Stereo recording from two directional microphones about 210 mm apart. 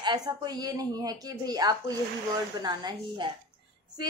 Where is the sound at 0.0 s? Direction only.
20° right (ahead or behind).